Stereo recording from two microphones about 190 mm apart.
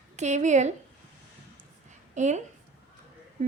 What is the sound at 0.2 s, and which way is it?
Speech, 40° right (ahead or behind).